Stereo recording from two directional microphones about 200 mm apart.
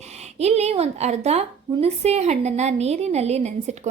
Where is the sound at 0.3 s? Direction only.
30° right (ahead or behind).